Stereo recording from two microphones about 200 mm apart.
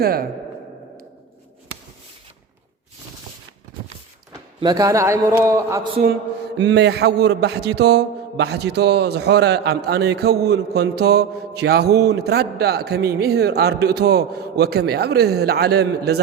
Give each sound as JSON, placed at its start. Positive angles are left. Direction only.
{"t": 0.0, "sound": "speech", "side_deg": -50}
{"t": 4.3, "sound": "speech", "side_deg": -20}
{"t": 6.6, "sound": "a man's voice", "side_deg": -60}